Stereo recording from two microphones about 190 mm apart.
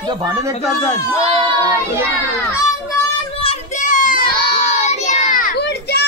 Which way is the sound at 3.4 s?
40° left (ahead or behind).